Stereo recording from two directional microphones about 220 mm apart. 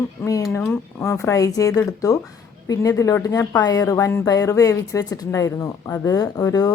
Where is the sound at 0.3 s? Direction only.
15° left (ahead or behind).